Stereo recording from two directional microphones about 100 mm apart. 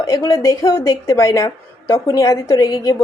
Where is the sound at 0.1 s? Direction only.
30° left (ahead or behind).